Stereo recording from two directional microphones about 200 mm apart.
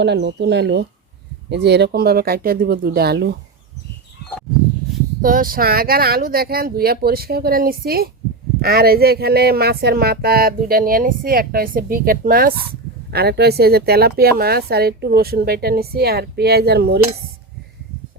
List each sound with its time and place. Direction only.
0.0 s speech: 60° right (ahead or behind)
5.2 s speech: 45° right (ahead or behind)